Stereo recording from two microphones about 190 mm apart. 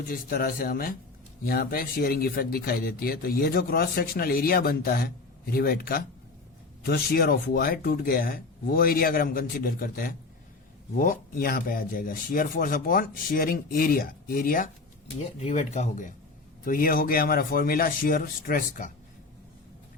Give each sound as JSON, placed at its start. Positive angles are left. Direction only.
{"t": 0.0, "sound": "speech", "side_deg": 50}
{"t": 15.4, "sound": "speech", "side_deg": 35}